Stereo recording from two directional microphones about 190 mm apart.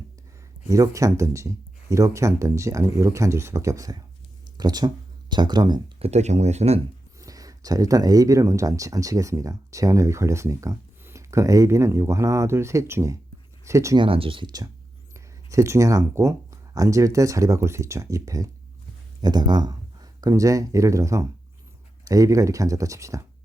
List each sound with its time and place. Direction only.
0.7 s speech: 15° right (ahead or behind)
6.1 s speech: 35° right (ahead or behind)
7.2 s speech: 20° right (ahead or behind)